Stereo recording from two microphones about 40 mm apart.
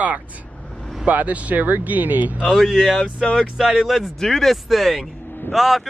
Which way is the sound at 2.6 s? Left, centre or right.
Centre.